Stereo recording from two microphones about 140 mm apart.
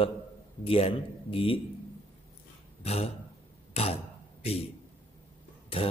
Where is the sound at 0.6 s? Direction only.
40° left (ahead or behind).